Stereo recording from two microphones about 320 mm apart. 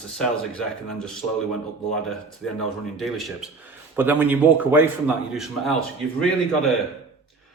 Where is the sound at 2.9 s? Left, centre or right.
Centre.